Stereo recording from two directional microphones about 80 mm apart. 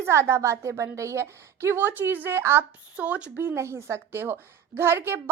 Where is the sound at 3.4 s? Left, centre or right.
Right.